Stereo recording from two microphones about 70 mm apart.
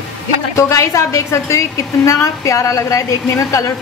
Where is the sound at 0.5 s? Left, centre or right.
Left.